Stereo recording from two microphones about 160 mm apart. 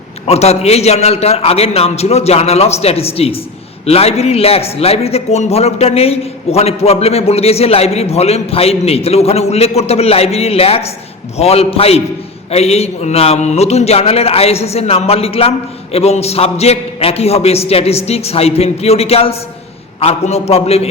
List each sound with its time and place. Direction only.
0.3 s a man's voice: 40° left (ahead or behind)